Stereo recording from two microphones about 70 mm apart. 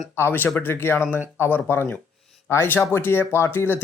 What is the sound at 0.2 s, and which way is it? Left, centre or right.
Speech, left.